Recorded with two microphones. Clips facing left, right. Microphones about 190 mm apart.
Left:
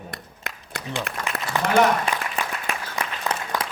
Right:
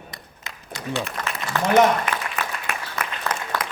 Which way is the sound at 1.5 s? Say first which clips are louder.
Right 2 dB; 15° left (ahead or behind).